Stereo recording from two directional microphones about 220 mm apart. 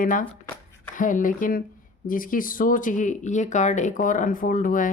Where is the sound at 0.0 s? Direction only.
35° left (ahead or behind).